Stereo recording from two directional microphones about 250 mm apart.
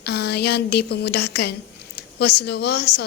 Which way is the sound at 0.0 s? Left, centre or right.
Left.